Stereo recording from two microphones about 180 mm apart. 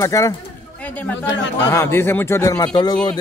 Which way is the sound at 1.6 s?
15° left (ahead or behind).